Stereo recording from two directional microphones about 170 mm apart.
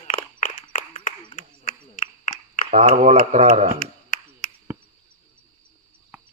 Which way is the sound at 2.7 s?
50° right (ahead or behind).